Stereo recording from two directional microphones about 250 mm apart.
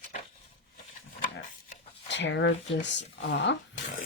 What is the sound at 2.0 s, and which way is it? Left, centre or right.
Speech, left.